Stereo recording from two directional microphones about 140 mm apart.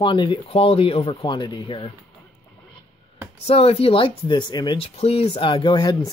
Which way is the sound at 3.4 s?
45° left (ahead or behind).